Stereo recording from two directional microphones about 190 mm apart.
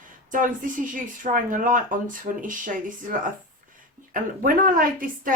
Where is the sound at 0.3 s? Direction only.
45° right (ahead or behind).